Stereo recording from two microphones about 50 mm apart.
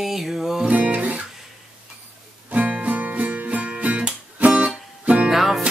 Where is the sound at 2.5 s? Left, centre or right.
Right.